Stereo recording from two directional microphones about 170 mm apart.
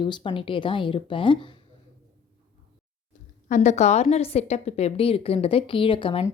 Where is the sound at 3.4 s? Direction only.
45° left (ahead or behind).